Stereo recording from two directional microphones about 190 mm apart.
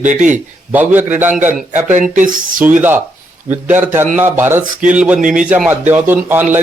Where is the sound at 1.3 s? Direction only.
40° right (ahead or behind).